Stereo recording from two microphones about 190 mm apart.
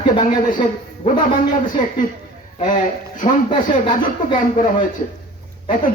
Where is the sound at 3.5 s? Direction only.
25° left (ahead or behind).